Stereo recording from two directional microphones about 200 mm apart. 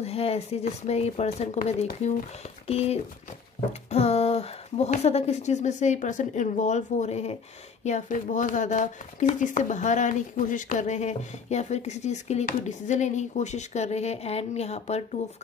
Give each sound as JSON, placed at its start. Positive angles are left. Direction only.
{"t": 0.0, "sound": "speech", "side_deg": 30}
{"t": 2.7, "sound": "speech", "side_deg": 30}